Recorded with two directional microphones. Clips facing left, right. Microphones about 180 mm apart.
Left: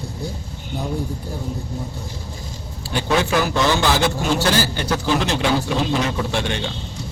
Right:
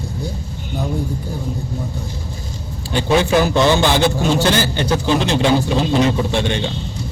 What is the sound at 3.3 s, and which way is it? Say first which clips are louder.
A man's voice: right 5 dB; 25° right (ahead or behind).